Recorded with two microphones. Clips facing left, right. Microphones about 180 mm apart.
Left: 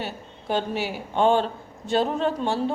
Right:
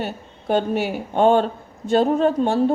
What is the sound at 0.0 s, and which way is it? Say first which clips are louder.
A woman's voice: right 5 dB; 50° right (ahead or behind).